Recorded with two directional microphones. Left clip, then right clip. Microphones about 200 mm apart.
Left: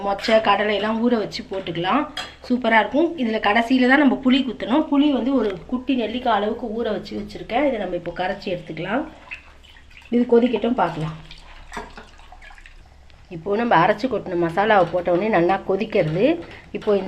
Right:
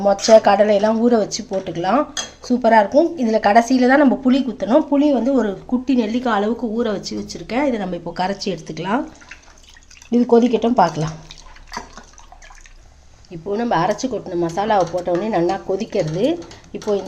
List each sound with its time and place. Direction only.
0.3 s speech: 45° right (ahead or behind); by 9.0 s 60° right (ahead or behind)
10.1 s speech: 50° right (ahead or behind)
13.3 s speech: 10° right (ahead or behind)